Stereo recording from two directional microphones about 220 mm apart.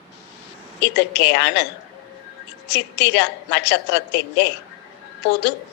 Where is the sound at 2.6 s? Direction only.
50° left (ahead or behind).